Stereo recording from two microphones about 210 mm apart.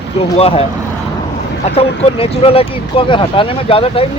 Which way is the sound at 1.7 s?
25° left (ahead or behind).